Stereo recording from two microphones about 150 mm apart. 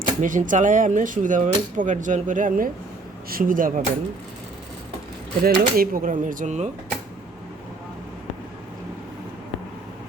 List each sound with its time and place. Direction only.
0.2 s speech: 60° right (ahead or behind)
3.2 s speech: 70° right (ahead or behind)
5.4 s speech: 75° right (ahead or behind); by 6.7 s 50° right (ahead or behind)